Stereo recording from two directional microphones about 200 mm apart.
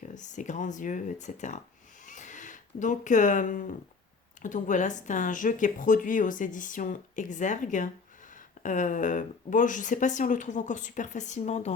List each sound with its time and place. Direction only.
0.0 s a woman's voice: 40° left (ahead or behind)
2.0 s a sound: 40° left (ahead or behind)
4.4 s a woman's voice: 40° left (ahead or behind)